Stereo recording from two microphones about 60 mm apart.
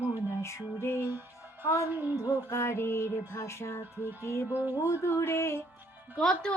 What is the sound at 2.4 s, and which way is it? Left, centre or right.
Music, left.